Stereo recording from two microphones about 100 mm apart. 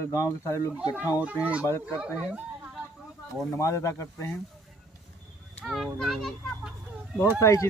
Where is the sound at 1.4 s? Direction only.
15° right (ahead or behind).